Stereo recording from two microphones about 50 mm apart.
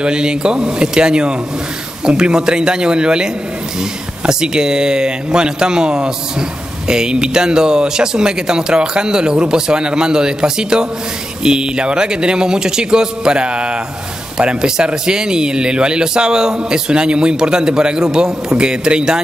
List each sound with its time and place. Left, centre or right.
0.0 s speech: centre
4.3 s speech: centre